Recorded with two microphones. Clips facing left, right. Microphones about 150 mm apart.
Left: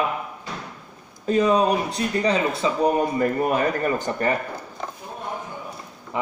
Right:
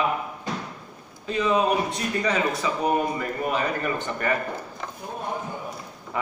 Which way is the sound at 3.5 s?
45° left (ahead or behind).